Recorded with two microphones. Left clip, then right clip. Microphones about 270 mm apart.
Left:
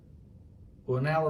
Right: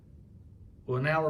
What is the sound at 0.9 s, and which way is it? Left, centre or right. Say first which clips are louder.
Speech: even; centre.